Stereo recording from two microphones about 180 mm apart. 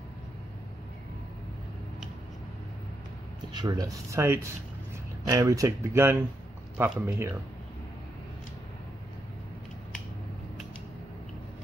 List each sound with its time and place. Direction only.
3.5 s speech: 20° right (ahead or behind)